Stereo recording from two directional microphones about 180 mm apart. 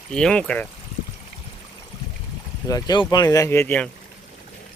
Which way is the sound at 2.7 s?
20° left (ahead or behind).